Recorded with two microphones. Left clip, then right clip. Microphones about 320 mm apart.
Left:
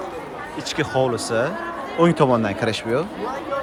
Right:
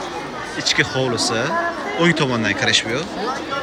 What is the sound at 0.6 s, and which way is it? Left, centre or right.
Speech, centre.